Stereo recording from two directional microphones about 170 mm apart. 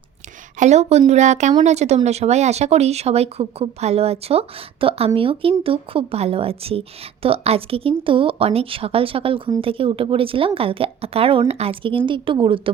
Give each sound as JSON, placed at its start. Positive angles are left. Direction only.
{"t": 0.6, "sound": "speech", "side_deg": -40}